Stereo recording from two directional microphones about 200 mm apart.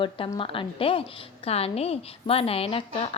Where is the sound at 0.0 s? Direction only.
25° left (ahead or behind).